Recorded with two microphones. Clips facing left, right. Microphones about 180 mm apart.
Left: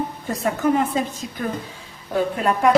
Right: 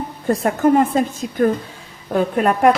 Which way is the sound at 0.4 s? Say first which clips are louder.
Right 4 dB; 50° right (ahead or behind).